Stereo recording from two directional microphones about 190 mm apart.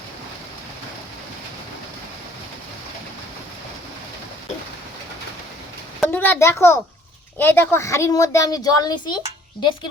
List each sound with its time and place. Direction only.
6.1 s a woman's voice: 10° left (ahead or behind)